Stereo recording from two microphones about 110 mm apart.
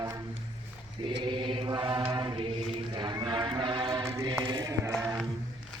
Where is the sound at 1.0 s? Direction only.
50° right (ahead or behind).